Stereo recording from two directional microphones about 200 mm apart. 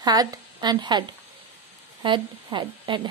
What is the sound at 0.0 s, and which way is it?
A woman's voice, 20° right (ahead or behind).